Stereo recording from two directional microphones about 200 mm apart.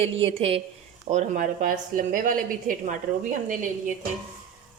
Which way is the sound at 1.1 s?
40° right (ahead or behind).